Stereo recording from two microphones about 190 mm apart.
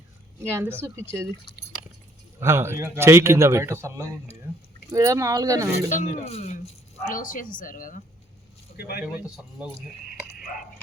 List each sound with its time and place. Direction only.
0.5 s a man's voice: 10° right (ahead or behind)
2.4 s a man's voice: 15° right (ahead or behind)
5.9 s speech: 35° left (ahead or behind)
7.1 s a woman's voice: 45° left (ahead or behind)
8.7 s speech: 55° left (ahead or behind)
9.0 s speech: 5° right (ahead or behind)